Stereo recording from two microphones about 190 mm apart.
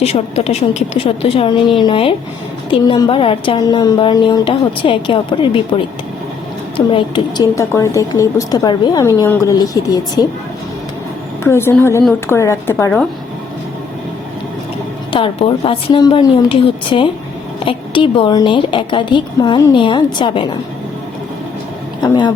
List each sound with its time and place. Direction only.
0.0 s a woman's voice: 35° left (ahead or behind)
11.4 s a woman's voice: 15° left (ahead or behind)
15.1 s a woman's voice: 30° left (ahead or behind)
22.0 s a woman's voice: 25° left (ahead or behind)